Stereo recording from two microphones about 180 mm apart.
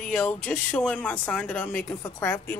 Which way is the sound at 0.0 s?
5° left (ahead or behind).